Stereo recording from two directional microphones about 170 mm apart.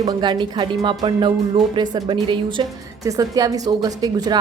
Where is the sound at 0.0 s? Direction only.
25° right (ahead or behind).